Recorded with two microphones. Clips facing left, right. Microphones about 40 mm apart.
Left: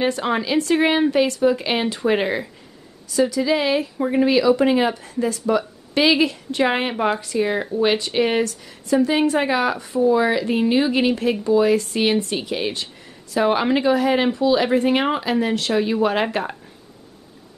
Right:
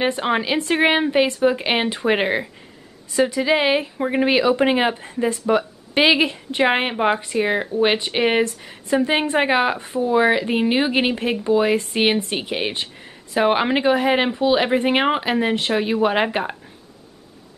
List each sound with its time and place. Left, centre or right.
0.0 s speech: right